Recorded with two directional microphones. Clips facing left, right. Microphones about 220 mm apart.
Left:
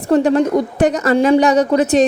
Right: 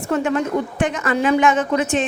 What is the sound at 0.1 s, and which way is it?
A woman's voice, 35° left (ahead or behind).